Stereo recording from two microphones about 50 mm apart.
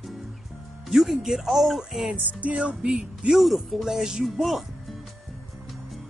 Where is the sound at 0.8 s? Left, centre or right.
Centre.